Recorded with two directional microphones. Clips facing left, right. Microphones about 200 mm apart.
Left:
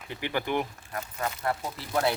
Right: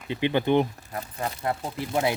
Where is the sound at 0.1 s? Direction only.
20° right (ahead or behind).